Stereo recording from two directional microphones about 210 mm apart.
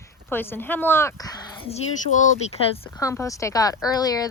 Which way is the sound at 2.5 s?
30° left (ahead or behind).